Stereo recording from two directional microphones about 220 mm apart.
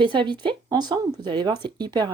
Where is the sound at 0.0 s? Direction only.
20° right (ahead or behind).